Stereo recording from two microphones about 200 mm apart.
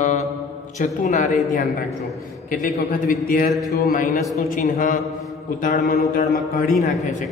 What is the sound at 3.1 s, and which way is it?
Mantra, 45° left (ahead or behind).